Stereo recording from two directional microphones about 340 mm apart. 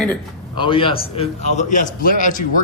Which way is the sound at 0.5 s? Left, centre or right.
Centre.